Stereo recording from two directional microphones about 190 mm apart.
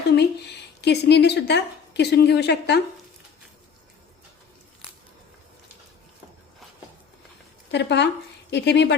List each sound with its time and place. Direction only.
0.2 s speech: 60° left (ahead or behind)
7.7 s speech: 65° left (ahead or behind)